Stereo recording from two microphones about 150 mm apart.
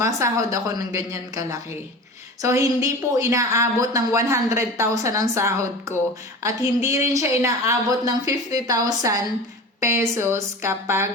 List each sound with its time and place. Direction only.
0.0 s a woman's voice: 20° right (ahead or behind)